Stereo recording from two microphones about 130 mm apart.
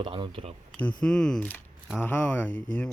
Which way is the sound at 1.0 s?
5° left (ahead or behind).